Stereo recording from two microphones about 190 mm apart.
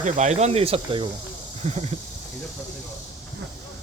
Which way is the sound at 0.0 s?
40° right (ahead or behind).